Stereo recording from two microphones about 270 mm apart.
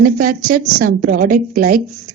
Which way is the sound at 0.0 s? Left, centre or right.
Right.